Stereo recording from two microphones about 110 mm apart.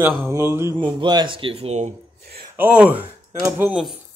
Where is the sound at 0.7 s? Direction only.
45° right (ahead or behind); by 2.0 s 85° right.